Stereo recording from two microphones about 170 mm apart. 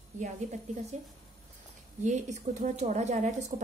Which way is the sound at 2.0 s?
45° right (ahead or behind).